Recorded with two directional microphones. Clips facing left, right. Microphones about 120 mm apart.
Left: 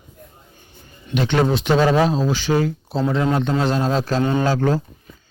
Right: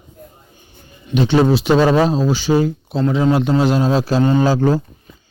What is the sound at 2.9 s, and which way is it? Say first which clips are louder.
A man's voice: right 4 dB; centre (ahead or behind).